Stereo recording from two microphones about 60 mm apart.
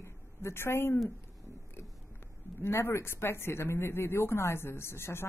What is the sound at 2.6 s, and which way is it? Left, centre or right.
Speech, left.